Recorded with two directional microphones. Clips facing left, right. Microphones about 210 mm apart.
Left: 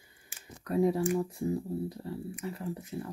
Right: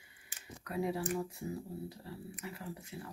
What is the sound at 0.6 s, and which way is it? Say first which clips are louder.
Speech: left 8 dB; 40° left (ahead or behind).